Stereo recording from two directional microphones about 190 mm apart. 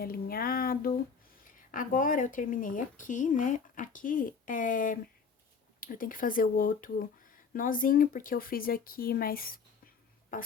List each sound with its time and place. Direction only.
0.0 s speech: 50° left (ahead or behind)